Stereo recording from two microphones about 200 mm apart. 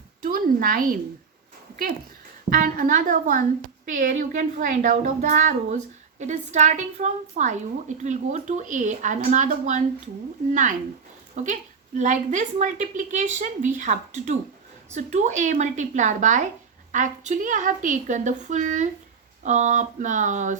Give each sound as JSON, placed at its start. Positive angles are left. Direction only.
{"t": 0.2, "sound": "a woman's voice", "side_deg": -45}